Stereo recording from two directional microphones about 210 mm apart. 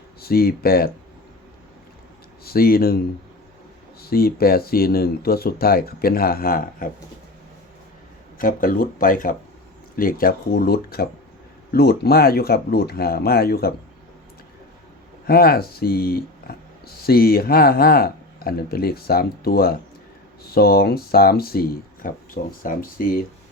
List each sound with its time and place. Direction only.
0.2 s speech: 45° left (ahead or behind)
2.4 s speech: 45° left (ahead or behind)
4.0 s speech: 45° left (ahead or behind)
8.4 s speech: 40° left (ahead or behind)
15.3 s speech: 45° left (ahead or behind)